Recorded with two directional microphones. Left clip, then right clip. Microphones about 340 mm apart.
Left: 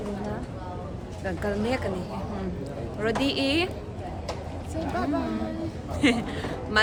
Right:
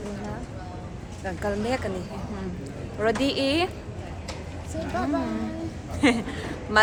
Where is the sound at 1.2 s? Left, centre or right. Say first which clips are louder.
Even; centre.